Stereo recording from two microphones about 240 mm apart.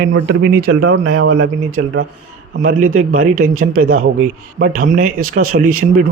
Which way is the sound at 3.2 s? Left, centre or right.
Right.